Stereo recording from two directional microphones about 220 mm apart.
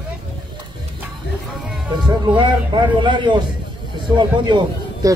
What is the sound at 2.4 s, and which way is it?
A man's voice, 20° right (ahead or behind).